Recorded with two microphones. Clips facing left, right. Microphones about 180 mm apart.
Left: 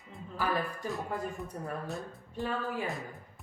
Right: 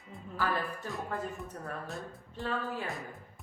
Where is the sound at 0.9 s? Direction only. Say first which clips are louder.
Left 2 dB; centre (ahead or behind).